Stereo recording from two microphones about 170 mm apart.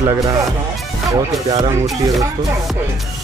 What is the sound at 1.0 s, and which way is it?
Speech, 25° right (ahead or behind).